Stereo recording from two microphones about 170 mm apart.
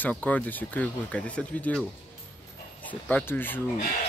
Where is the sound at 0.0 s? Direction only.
10° left (ahead or behind).